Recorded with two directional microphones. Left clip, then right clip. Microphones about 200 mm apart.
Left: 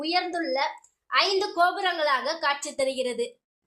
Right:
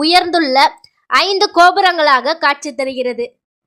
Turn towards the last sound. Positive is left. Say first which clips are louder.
# right 8 dB
turn(degrees=-25)  # may be behind; listen again after turning